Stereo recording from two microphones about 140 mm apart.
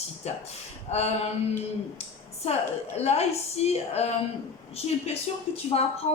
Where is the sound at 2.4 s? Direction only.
50° left (ahead or behind).